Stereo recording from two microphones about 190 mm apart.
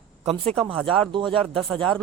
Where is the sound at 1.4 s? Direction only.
Centre (ahead or behind).